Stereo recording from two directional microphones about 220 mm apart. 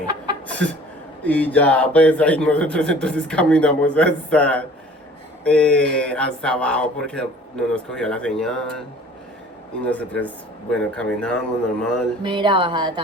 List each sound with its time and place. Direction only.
1.2 s a man's voice: 5° left (ahead or behind)
9.8 s a man's voice: 5° left (ahead or behind)
12.2 s speech: 20° right (ahead or behind)